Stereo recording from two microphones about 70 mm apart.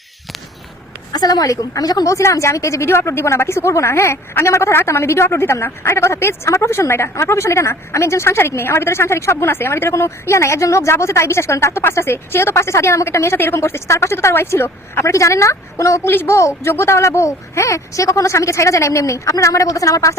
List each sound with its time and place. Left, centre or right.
1.1 s a woman's voice: left
2.1 s speech: left
2.8 s speech: left
16.0 s speech: left